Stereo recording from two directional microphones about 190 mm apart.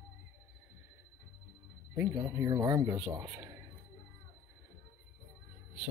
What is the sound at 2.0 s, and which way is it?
Speech, 10° right (ahead or behind).